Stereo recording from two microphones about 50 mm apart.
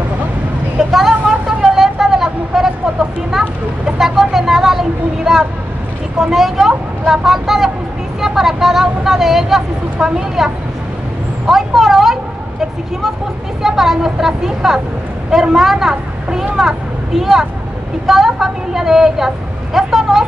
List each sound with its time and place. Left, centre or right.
0.7 s vehicle: centre
6.1 s speech: centre
11.4 s a sound: centre
13.6 s a woman's voice: centre